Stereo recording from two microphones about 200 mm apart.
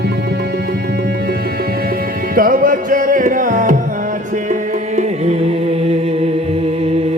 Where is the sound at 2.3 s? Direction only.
45° right (ahead or behind).